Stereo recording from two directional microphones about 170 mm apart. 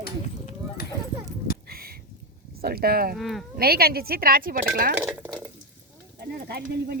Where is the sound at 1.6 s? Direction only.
60° right (ahead or behind).